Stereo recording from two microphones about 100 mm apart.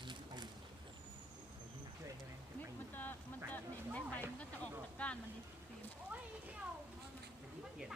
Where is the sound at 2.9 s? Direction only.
20° left (ahead or behind).